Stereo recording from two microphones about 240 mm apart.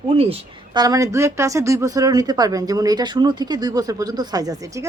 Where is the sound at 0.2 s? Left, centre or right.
Right.